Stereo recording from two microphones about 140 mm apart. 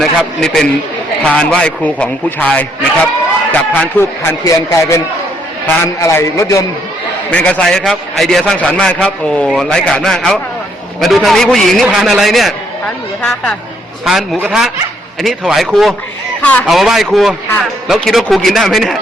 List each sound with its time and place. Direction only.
0.0 s a man's voice: 5° left (ahead or behind); by 6.7 s 20° left (ahead or behind)
7.3 s a man's voice: 10° left (ahead or behind)
14.0 s a man's voice: centre (ahead or behind)
15.2 s a man's voice: centre (ahead or behind)